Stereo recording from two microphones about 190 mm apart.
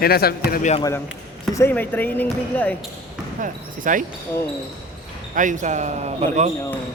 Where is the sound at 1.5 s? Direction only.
10° left (ahead or behind).